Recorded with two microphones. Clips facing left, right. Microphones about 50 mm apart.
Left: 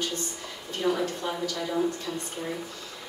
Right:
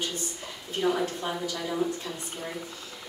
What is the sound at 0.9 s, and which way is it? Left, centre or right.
Speech, centre.